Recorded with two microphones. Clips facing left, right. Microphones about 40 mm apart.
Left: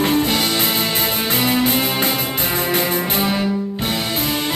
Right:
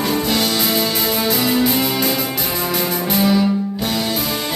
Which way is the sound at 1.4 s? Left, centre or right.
Left.